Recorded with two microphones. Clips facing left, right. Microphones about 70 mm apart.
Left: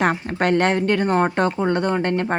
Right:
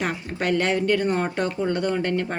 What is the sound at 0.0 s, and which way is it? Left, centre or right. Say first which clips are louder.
Speech: left 6 dB; left.